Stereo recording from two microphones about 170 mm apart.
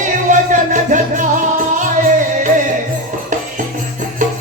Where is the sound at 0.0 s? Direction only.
45° right (ahead or behind).